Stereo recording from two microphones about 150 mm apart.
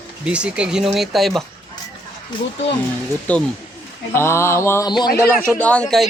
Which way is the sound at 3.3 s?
10° left (ahead or behind).